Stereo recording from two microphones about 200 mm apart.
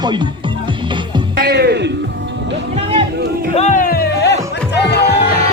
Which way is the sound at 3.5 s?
35° left (ahead or behind).